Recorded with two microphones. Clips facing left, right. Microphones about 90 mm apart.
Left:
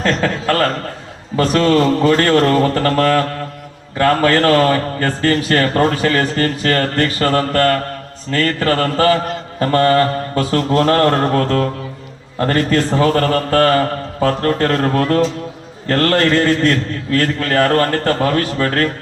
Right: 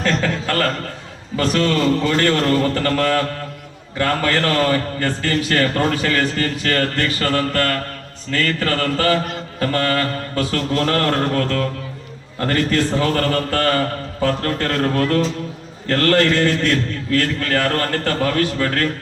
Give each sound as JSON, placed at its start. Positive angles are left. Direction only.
{"t": 0.0, "sound": "chuckle", "side_deg": 40}
{"t": 1.4, "sound": "a man's voice", "side_deg": 40}
{"t": 2.6, "sound": "a sound", "side_deg": 25}
{"t": 2.8, "sound": "mantra", "side_deg": 40}
{"t": 3.9, "sound": "a man's voice", "side_deg": 40}